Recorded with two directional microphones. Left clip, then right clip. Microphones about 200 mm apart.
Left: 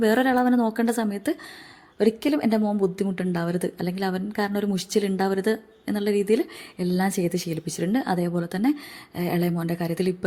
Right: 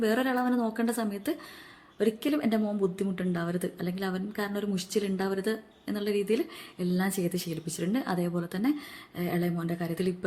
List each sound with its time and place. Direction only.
0.0 s speech: 30° left (ahead or behind)